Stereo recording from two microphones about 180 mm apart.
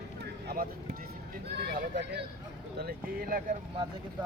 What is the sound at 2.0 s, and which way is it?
Speech, 70° right (ahead or behind).